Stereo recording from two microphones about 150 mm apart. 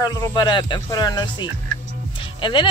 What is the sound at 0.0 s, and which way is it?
A woman's voice, 25° left (ahead or behind).